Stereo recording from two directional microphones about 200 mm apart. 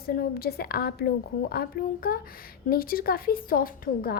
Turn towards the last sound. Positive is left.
turn(degrees=45)  # may be behind; listen again after turning